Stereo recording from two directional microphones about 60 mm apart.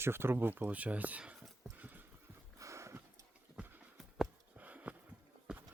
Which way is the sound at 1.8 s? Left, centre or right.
Right.